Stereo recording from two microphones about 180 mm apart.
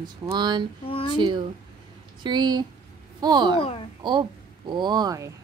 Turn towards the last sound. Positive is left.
turn(degrees=-20)  # may be behind; listen again after turning